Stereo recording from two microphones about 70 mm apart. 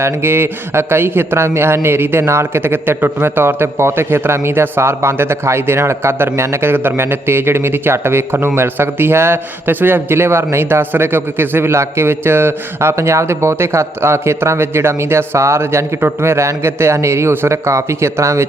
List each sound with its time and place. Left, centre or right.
0.0 s a man's voice: right